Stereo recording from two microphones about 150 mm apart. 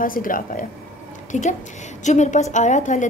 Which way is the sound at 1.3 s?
55° left (ahead or behind).